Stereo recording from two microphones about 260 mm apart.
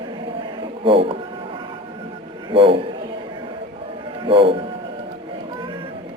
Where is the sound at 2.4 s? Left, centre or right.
Centre.